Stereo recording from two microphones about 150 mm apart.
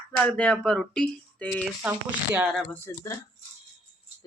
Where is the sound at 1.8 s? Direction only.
5° right (ahead or behind).